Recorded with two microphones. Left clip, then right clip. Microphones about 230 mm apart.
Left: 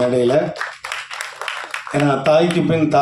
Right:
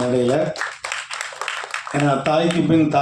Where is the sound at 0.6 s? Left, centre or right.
Centre.